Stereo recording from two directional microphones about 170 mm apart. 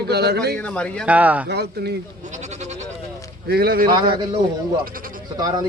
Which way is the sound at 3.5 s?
65° right (ahead or behind).